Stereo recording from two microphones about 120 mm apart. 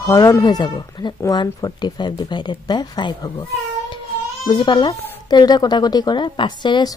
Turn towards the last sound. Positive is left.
turn(degrees=40)  # may be behind; listen again after turning